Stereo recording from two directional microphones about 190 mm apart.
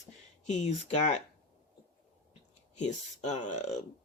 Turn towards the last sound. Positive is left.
turn(degrees=40)  # may be behind; listen again after turning